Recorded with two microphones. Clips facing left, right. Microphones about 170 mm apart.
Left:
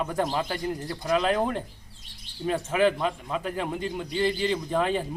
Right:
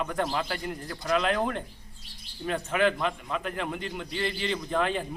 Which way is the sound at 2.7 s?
35° left (ahead or behind).